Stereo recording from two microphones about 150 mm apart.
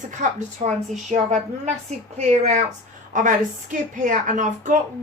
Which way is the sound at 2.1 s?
50° right (ahead or behind).